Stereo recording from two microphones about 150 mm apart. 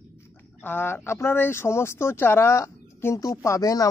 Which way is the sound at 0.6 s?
15° left (ahead or behind).